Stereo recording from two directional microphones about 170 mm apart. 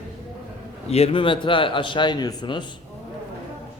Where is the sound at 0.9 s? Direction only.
35° left (ahead or behind).